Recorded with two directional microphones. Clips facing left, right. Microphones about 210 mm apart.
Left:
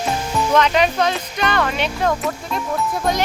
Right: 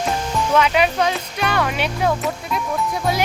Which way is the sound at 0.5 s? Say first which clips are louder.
Left 1 dB; 10° right (ahead or behind).